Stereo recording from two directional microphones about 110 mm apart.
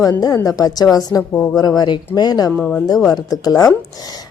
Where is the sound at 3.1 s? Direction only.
35° left (ahead or behind).